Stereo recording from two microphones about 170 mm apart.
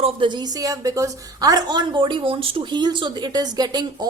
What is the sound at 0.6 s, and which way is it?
A woman's voice, 20° right (ahead or behind).